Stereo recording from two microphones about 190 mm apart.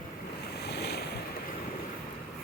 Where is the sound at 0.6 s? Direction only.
60° left (ahead or behind).